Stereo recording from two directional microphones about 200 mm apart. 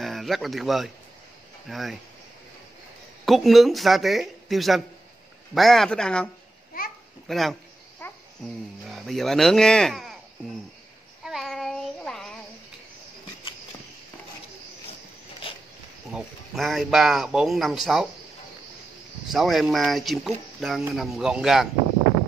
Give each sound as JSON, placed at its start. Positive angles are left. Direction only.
{"t": 0.0, "sound": "speech", "side_deg": 0}
{"t": 3.3, "sound": "speech", "side_deg": 0}
{"t": 6.7, "sound": "babbling", "side_deg": 45}
{"t": 7.2, "sound": "a man's voice", "side_deg": 0}
{"t": 8.0, "sound": "babbling", "side_deg": 10}
{"t": 8.8, "sound": "speech", "side_deg": 0}
{"t": 11.2, "sound": "child singing", "side_deg": 0}
{"t": 16.1, "sound": "speech", "side_deg": 0}
{"t": 19.2, "sound": "speech", "side_deg": 0}